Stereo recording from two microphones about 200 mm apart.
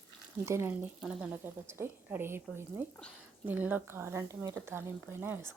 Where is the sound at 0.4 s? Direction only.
10° right (ahead or behind).